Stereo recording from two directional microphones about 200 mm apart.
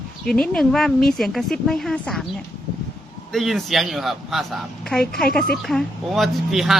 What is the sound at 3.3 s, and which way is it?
Speech, centre (ahead or behind).